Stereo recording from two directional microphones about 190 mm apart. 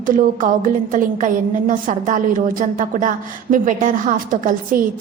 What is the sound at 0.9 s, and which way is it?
A woman's voice, 45° right (ahead or behind).